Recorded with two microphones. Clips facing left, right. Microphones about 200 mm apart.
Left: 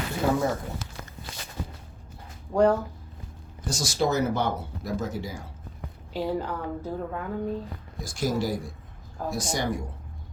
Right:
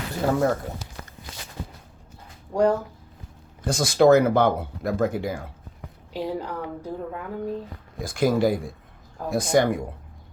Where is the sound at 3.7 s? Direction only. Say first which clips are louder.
Right 10 dB; 55° right (ahead or behind).